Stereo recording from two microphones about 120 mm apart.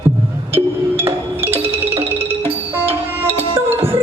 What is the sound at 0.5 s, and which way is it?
Music, 20° right (ahead or behind).